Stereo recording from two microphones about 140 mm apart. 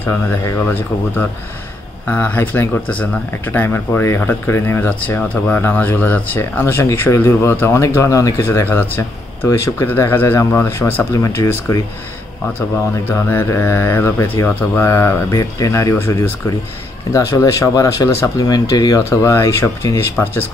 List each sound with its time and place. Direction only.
0.0 s speech: 15° left (ahead or behind)
13.1 s speech: 20° left (ahead or behind)